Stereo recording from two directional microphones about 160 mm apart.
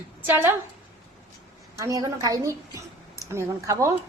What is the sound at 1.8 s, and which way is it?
A woman's voice, 20° right (ahead or behind).